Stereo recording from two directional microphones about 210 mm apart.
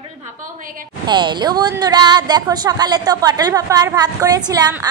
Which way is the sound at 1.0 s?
20° right (ahead or behind).